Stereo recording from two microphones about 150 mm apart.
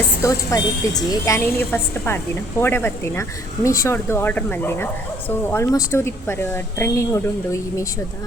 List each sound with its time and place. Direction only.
0.2 s a woman's voice: 20° left (ahead or behind)